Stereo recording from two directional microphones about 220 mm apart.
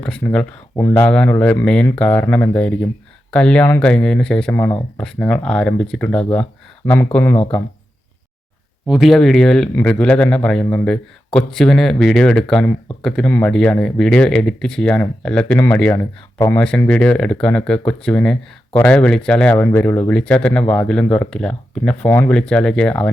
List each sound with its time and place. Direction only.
0.0 s speech: 5° left (ahead or behind)
8.9 s speech: centre (ahead or behind)